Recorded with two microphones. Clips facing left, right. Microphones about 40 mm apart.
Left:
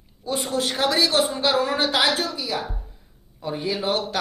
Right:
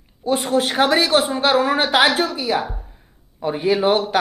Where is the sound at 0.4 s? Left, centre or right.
Centre.